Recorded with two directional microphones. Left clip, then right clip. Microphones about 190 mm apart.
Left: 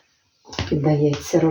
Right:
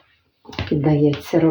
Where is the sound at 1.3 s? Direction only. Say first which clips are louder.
Right 1 dB; 45° right (ahead or behind).